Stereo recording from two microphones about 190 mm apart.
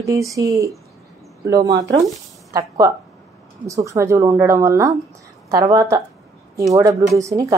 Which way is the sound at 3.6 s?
15° right (ahead or behind).